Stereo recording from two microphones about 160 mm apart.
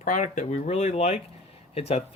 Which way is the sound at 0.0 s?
50° left (ahead or behind).